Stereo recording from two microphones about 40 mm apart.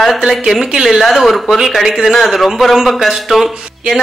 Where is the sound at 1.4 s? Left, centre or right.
Centre.